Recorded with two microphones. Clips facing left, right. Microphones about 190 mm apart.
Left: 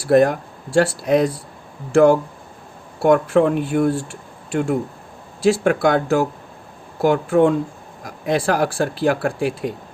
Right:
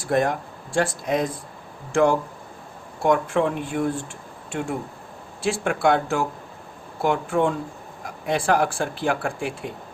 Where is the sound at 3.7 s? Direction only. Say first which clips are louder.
Left 6 dB; 50° left (ahead or behind).